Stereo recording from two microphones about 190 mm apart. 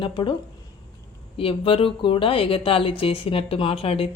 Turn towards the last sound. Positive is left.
turn(degrees=30)  # may be behind; listen again after turning